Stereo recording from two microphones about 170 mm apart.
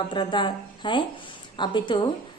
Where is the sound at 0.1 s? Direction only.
30° left (ahead or behind).